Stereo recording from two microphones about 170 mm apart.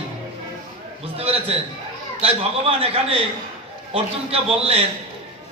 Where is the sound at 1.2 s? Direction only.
35° right (ahead or behind).